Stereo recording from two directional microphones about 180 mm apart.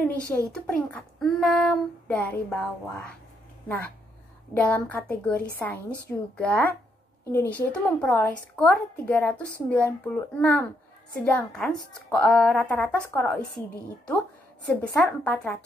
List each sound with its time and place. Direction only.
0.0 s a woman's voice: 10° left (ahead or behind)
4.6 s a woman's voice: 10° left (ahead or behind)
15.0 s a child's voice: 5° left (ahead or behind)